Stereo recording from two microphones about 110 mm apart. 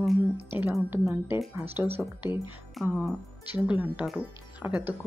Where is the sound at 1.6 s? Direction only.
20° right (ahead or behind).